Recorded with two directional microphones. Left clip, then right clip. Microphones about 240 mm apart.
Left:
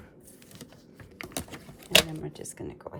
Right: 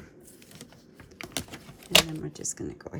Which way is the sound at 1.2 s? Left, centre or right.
Centre.